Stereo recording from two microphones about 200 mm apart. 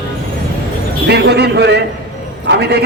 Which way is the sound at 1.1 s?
55° right (ahead or behind).